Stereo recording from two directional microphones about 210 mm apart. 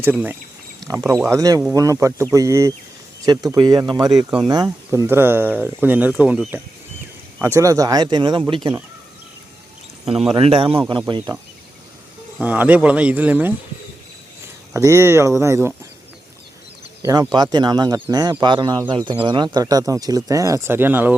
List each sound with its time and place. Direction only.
0.0 s speech: 10° right (ahead or behind)
7.4 s speech: 15° right (ahead or behind)
10.3 s speech: 25° right (ahead or behind)
12.4 s speech: 5° right (ahead or behind)
14.7 s speech: 15° right (ahead or behind)
17.3 s speech: 20° right (ahead or behind)